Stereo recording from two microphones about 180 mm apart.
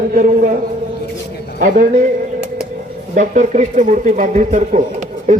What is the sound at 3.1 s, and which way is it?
A man's voice, 40° right (ahead or behind).